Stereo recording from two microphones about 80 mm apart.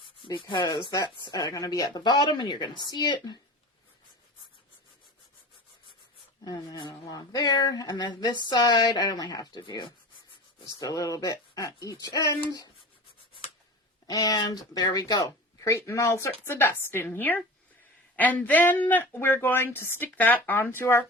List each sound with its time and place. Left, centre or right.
0.3 s speech: left
0.9 s speech: left
1.4 s speech: left
1.9 s speech: left
6.4 s speech: left
10.8 s speech: left
12.5 s speech: left
14.1 s speech: left